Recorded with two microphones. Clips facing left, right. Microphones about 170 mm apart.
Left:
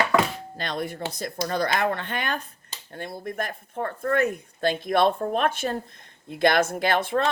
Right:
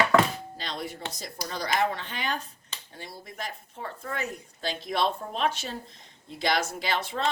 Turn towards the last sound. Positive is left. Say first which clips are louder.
# left 7 dB
turn(degrees=55)  # may be behind; listen again after turning